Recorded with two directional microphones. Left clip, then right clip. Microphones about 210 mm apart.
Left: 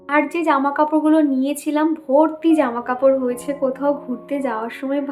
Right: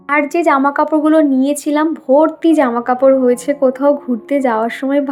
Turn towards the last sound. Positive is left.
turn(degrees=-35)  # may be behind; listen again after turning